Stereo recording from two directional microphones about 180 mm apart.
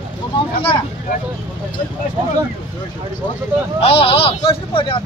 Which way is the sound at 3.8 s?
30° left (ahead or behind).